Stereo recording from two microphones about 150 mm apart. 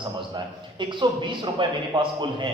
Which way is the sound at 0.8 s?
30° right (ahead or behind).